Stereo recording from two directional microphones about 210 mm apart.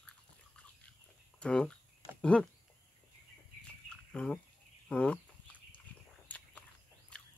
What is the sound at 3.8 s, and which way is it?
Bird, 5° left (ahead or behind).